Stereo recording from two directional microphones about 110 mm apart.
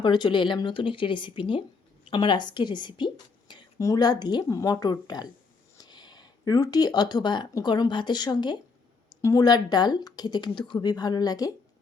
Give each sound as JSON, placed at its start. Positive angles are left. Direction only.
{"t": 0.0, "sound": "speech", "side_deg": 45}
{"t": 3.8, "sound": "speech", "side_deg": 35}